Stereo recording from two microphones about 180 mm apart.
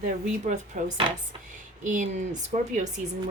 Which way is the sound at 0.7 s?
50° right (ahead or behind).